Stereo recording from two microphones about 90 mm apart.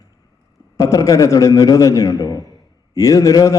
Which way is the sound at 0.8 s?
40° left (ahead or behind).